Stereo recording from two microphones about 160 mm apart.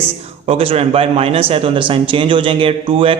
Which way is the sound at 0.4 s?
35° right (ahead or behind).